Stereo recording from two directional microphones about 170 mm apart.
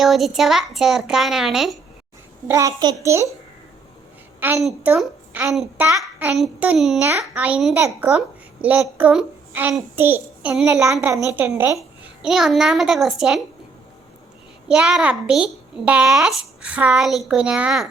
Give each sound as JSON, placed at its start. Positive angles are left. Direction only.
{"t": 0.0, "sound": "a child's voice", "side_deg": 0}
{"t": 2.5, "sound": "a child's voice", "side_deg": -20}
{"t": 4.4, "sound": "a woman's voice", "side_deg": -10}
{"t": 11.3, "sound": "a child's voice", "side_deg": -15}
{"t": 12.2, "sound": "a child's voice", "side_deg": 0}
{"t": 14.7, "sound": "a child's voice", "side_deg": -5}